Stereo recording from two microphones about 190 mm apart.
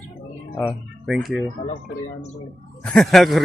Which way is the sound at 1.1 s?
Centre (ahead or behind).